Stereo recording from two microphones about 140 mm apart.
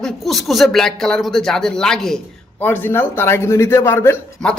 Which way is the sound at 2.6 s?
15° left (ahead or behind).